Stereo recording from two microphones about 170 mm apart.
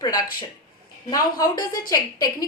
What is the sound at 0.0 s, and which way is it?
A woman's voice, 20° left (ahead or behind).